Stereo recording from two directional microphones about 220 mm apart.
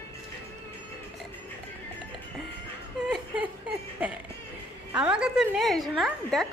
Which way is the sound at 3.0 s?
5° right (ahead or behind).